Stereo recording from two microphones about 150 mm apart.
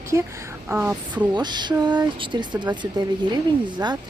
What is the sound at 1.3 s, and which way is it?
Speech, 30° right (ahead or behind).